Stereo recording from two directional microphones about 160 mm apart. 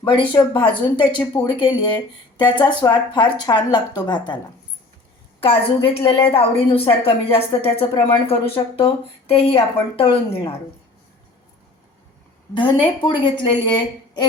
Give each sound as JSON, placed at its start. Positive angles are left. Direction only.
{"t": 0.0, "sound": "speech", "side_deg": 30}
{"t": 5.4, "sound": "speech", "side_deg": 35}
{"t": 12.5, "sound": "speech", "side_deg": 30}